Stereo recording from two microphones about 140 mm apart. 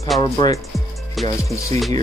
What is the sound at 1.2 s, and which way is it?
Music, centre (ahead or behind).